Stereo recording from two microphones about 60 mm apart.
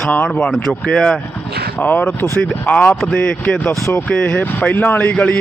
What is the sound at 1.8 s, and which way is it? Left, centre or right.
Speech, left.